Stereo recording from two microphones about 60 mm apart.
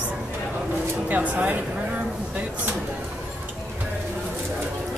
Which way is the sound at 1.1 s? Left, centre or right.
Right.